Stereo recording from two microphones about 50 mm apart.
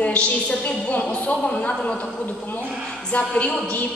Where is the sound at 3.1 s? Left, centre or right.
Left.